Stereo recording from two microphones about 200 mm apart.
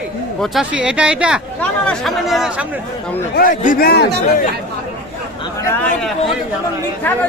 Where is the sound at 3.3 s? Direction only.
40° left (ahead or behind).